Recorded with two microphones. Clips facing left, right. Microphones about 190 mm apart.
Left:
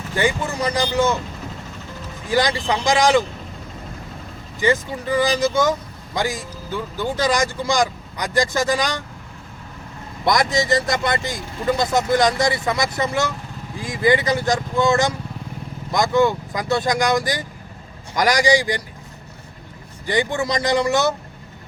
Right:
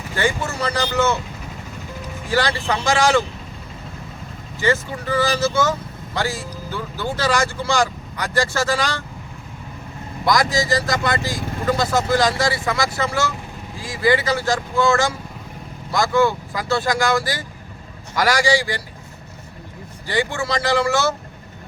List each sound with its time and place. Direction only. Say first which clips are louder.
0.2 s speech: left 1 dB; 15° left (ahead or behind)
2.3 s speech: left 1 dB; 15° left (ahead or behind)
4.6 s speech: left 1 dB; 15° left (ahead or behind)
10.2 s speech: even; 25° left (ahead or behind)
20.1 s speech: left 2 dB; 20° left (ahead or behind)